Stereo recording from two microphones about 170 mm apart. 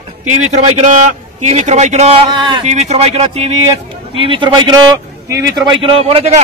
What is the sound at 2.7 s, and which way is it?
A man's voice, 40° right (ahead or behind).